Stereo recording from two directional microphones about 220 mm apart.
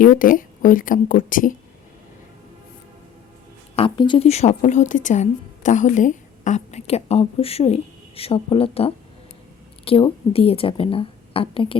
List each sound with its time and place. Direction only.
0.0 s speech: 40° left (ahead or behind)
3.8 s a woman's voice: 20° left (ahead or behind)